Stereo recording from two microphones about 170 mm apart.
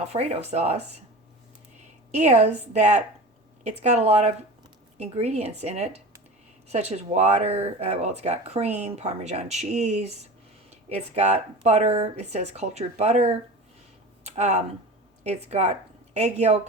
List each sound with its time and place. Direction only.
0.0 s speech: 40° right (ahead or behind)
2.1 s a woman's voice: 40° right (ahead or behind)